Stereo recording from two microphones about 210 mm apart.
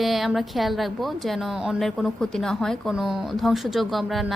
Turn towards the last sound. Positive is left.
turn(degrees=0)  # may be behind; listen again after turning